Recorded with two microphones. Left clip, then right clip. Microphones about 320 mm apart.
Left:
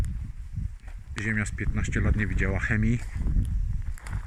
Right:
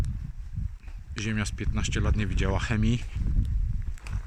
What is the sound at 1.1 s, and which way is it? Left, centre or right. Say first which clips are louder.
Speech: left 3 dB; centre.